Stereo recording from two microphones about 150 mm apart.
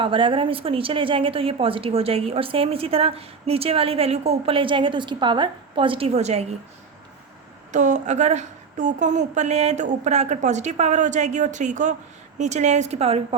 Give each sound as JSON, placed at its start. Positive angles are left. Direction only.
{"t": 0.0, "sound": "a woman's voice", "side_deg": -35}
{"t": 7.7, "sound": "a woman's voice", "side_deg": -55}